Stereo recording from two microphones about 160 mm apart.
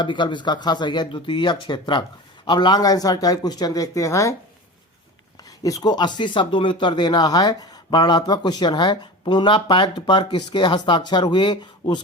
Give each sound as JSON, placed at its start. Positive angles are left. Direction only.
{"t": 0.0, "sound": "speech", "side_deg": 30}
{"t": 5.6, "sound": "speech", "side_deg": 25}